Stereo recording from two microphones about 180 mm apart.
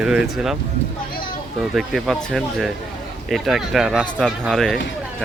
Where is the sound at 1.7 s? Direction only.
Centre (ahead or behind).